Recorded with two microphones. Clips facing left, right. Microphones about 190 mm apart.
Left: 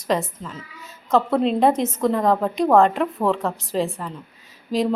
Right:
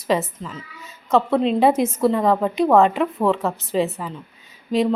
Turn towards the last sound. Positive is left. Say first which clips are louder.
# right 2 dB
turn(degrees=0)  # may be behind; listen again after turning